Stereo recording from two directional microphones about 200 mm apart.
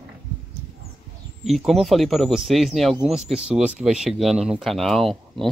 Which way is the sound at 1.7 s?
Centre (ahead or behind).